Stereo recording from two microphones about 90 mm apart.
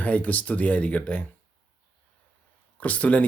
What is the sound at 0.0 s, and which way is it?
A man's voice, 15° left (ahead or behind).